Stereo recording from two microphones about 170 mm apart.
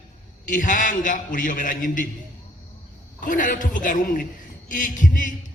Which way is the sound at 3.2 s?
50° left (ahead or behind).